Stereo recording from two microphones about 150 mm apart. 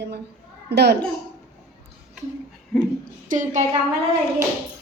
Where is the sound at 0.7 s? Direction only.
90° right.